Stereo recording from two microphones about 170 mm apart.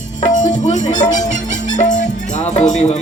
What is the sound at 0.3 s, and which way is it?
Music, 45° left (ahead or behind).